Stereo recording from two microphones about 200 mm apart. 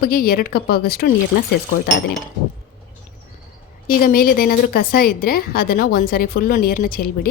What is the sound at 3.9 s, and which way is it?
Speech, 45° left (ahead or behind).